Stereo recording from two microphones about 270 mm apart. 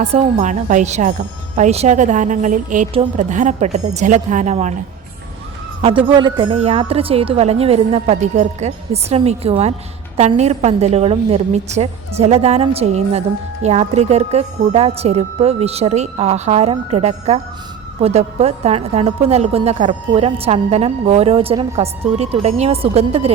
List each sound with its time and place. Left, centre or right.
0.0 s a woman's voice: right
6.1 s a woman's voice: centre